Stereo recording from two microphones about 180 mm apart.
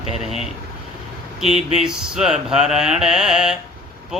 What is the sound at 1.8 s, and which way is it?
Mantra, 5° right (ahead or behind).